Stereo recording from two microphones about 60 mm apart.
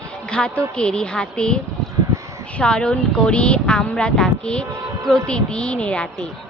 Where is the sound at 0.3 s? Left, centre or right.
Centre.